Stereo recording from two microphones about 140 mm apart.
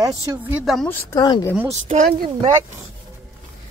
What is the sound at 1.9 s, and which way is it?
Speech, 50° right (ahead or behind).